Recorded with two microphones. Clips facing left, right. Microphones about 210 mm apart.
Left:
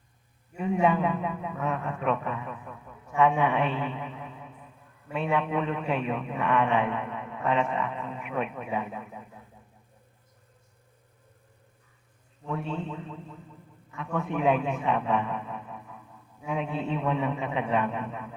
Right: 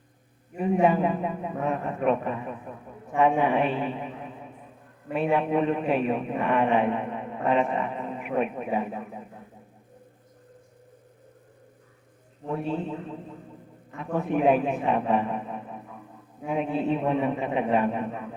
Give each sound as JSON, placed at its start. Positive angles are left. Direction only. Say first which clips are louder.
{"t": 0.5, "sound": "a man's voice", "louder": "right 3 dB", "side_deg": -45}
{"t": 12.5, "sound": "a man's voice", "louder": "right 4 dB", "side_deg": -35}
{"t": 12.8, "sound": "speech", "louder": "right 4 dB", "side_deg": -15}
{"t": 13.9, "sound": "a man's voice", "louder": "right 4 dB", "side_deg": -35}
{"t": 16.9, "sound": "a man's voice", "louder": "right 2 dB", "side_deg": -45}